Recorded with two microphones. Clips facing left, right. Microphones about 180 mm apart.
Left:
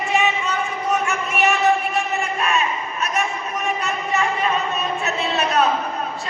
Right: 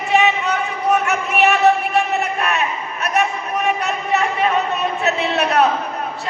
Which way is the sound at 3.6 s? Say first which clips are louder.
Right 3 dB; 65° right (ahead or behind).